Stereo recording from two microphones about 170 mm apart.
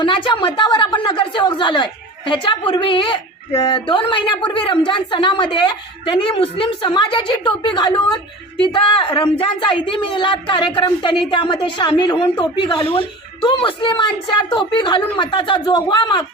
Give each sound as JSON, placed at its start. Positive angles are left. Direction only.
{"t": 0.0, "sound": "a woman's voice", "side_deg": 30}